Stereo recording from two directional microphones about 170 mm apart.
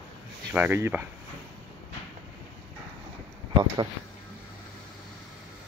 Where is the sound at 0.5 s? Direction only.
10° right (ahead or behind).